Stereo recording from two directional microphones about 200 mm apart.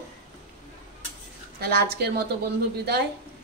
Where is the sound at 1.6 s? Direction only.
50° right (ahead or behind).